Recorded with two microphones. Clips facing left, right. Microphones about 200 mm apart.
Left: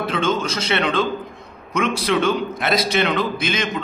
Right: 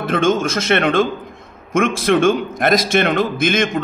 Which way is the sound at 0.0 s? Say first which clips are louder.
Right 5 dB; 50° right (ahead or behind).